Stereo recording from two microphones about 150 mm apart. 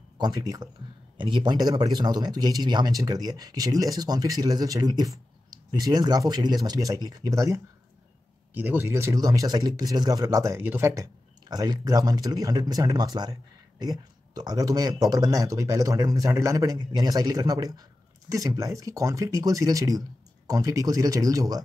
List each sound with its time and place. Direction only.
0.2 s speech: 25° right (ahead or behind)